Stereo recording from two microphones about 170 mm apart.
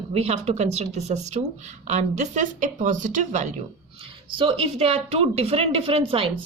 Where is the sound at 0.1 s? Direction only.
35° right (ahead or behind).